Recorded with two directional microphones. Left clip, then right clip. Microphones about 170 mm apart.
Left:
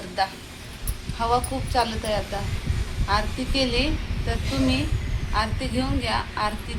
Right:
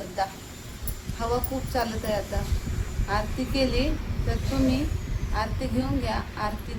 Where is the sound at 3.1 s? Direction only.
10° left (ahead or behind).